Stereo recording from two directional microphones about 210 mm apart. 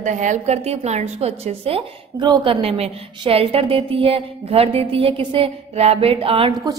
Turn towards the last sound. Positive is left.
turn(degrees=-25)  # may be behind; listen again after turning